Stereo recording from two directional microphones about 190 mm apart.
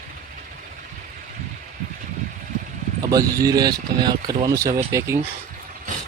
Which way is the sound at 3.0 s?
20° right (ahead or behind).